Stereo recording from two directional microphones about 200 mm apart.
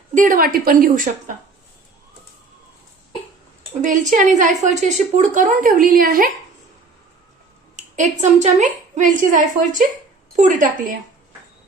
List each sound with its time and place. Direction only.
0.1 s a woman's voice: 40° right (ahead or behind)
3.8 s speech: 40° right (ahead or behind)
7.8 s a woman's voice: 35° right (ahead or behind)